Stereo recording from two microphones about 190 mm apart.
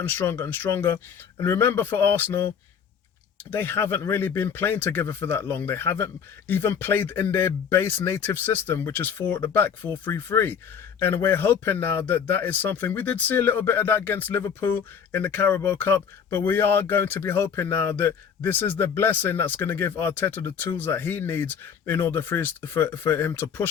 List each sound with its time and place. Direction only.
0.0 s speech: 10° left (ahead or behind)
3.5 s speech: 10° left (ahead or behind)